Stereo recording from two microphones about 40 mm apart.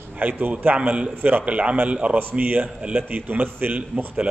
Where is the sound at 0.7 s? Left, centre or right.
Right.